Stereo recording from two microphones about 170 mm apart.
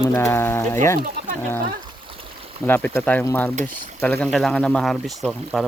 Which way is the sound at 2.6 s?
10° left (ahead or behind).